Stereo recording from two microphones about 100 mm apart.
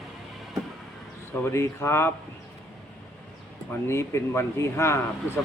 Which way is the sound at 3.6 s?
25° left (ahead or behind).